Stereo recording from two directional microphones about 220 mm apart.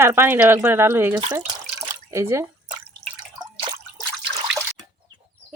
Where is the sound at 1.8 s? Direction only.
10° right (ahead or behind).